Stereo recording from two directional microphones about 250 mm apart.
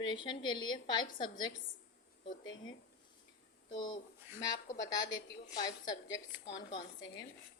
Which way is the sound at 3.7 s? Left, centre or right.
Centre.